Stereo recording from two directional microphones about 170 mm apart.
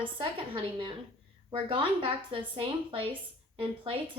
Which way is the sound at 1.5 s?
30° right (ahead or behind).